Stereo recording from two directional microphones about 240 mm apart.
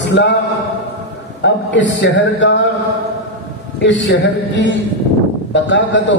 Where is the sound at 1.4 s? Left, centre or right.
Left.